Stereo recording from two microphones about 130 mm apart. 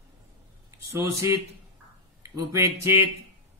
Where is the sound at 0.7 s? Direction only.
20° right (ahead or behind).